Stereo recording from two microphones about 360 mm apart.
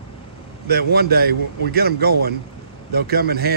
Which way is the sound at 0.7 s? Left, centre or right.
Right.